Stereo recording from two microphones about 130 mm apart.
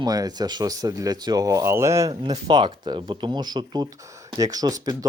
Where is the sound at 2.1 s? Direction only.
40° right (ahead or behind).